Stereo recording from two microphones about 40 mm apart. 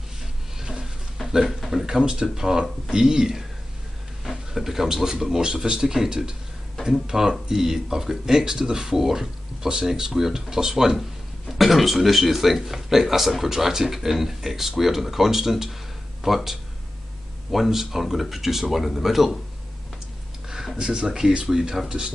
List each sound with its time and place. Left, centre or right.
0.6 s a sound: centre
1.4 s speech: centre
11.0 s speech: centre
20.4 s speech: centre